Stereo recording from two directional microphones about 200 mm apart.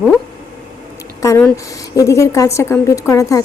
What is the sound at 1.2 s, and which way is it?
Speech, 15° left (ahead or behind).